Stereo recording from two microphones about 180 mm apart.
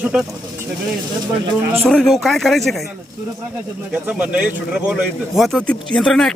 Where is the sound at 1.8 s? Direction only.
5° left (ahead or behind).